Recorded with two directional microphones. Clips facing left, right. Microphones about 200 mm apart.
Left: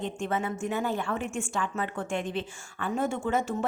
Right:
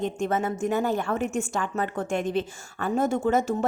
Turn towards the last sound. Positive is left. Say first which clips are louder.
# right 5 dB
turn(degrees=-40)  # may be behind; listen again after turning